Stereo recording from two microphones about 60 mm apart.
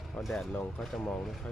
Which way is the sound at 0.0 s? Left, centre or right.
Centre.